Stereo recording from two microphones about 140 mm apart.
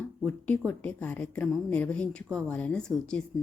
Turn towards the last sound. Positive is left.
turn(degrees=5)  # may be behind; listen again after turning